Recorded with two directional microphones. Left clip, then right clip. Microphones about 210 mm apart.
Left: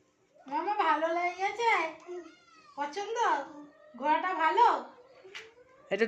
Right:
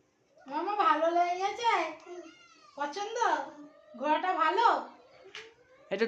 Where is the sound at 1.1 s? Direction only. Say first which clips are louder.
Right 2 dB; 15° right (ahead or behind).